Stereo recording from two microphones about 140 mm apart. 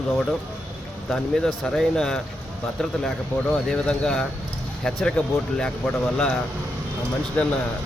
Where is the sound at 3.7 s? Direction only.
5° left (ahead or behind).